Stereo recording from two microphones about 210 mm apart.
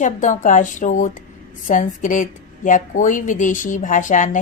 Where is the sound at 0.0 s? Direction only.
35° left (ahead or behind).